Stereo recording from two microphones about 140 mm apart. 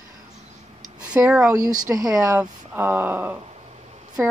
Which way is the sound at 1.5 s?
25° right (ahead or behind).